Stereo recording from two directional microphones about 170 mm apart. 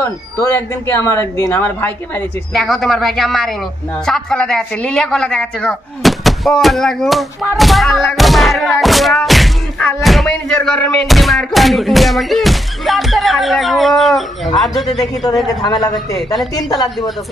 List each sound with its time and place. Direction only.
0.0 s speech: 15° left (ahead or behind)
2.5 s a woman's voice: centre (ahead or behind)
15.6 s a man's voice: 25° left (ahead or behind)